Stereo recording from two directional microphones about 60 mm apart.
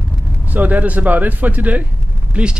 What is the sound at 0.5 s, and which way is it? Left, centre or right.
Speech, right.